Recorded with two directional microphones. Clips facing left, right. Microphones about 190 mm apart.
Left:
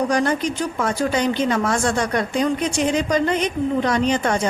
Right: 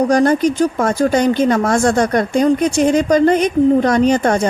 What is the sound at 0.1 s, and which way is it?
Speech, 45° right (ahead or behind).